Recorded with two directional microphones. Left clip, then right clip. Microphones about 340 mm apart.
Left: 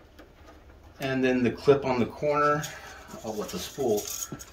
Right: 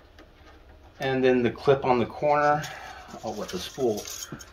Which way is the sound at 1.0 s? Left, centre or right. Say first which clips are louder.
Right 4 dB; centre.